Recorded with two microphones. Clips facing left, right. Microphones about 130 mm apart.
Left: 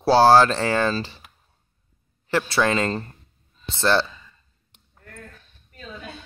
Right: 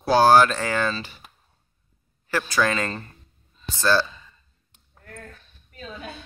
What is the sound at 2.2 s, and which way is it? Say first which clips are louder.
Speech: left 2 dB; 25° left (ahead or behind).